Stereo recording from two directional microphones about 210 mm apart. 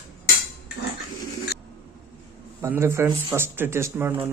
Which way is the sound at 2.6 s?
10° right (ahead or behind).